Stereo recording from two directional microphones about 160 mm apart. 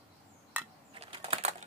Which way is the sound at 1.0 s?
35° right (ahead or behind).